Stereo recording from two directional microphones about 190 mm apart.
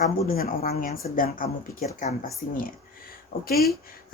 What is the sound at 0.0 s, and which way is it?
Speech, 50° left (ahead or behind).